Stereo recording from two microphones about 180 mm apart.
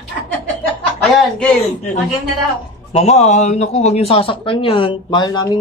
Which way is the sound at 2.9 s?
35° left (ahead or behind).